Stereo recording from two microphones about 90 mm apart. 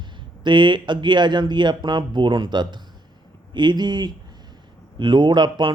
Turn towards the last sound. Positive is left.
turn(degrees=-55)  # may be behind; listen again after turning